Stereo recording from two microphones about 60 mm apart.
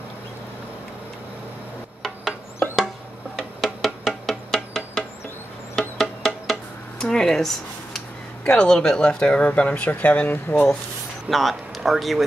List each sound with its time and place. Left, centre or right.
3.3 s music: centre
7.1 s a sound: centre
8.5 s speech: centre; by 10.7 s left
11.2 s speech: centre